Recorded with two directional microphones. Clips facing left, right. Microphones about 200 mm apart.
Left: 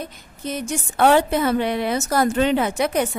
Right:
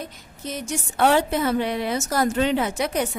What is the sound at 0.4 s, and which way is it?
A woman's voice, 55° left (ahead or behind).